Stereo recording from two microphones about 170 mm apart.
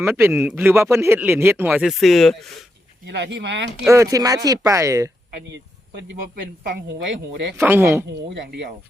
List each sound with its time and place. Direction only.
0.1 s speech: 15° right (ahead or behind)
1.9 s speech: centre (ahead or behind)
3.1 s speech: 90° right
3.8 s speech: 20° right (ahead or behind)
5.5 s a sound: 90° right
6.7 s speech: 85° right
7.6 s speech: 15° right (ahead or behind)
8.3 s speech: 90° right